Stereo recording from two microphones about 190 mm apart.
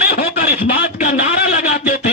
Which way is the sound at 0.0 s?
60° left (ahead or behind).